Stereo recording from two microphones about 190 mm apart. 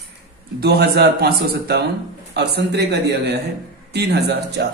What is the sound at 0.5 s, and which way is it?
Speech, 55° right (ahead or behind).